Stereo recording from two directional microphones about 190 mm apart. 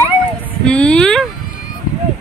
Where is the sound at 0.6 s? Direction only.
5° left (ahead or behind).